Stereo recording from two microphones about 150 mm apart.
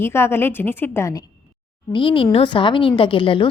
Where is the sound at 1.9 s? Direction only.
35° left (ahead or behind).